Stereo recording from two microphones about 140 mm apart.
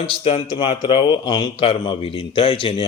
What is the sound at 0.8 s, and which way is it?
Speech, 30° left (ahead or behind).